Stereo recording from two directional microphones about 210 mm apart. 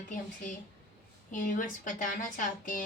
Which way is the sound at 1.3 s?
40° left (ahead or behind).